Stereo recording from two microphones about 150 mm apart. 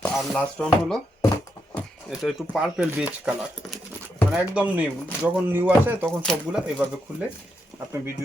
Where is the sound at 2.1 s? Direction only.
Centre (ahead or behind).